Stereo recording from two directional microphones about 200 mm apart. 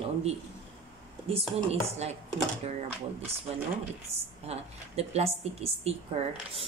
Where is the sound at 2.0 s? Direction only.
35° right (ahead or behind).